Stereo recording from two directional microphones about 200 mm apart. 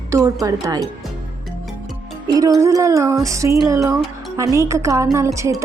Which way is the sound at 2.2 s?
20° right (ahead or behind).